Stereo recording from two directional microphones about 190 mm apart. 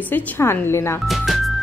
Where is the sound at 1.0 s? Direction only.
Centre (ahead or behind).